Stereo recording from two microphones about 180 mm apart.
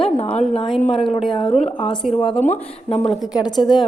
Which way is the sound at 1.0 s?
30° left (ahead or behind).